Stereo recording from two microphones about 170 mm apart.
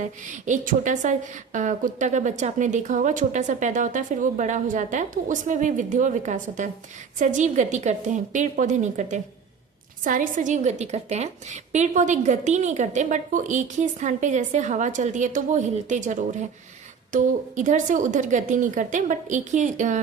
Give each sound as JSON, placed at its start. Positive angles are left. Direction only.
{"t": 0.0, "sound": "a woman's voice", "side_deg": -45}